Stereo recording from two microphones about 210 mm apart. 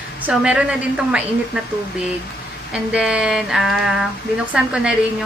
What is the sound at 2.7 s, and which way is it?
A woman's voice, 5° right (ahead or behind).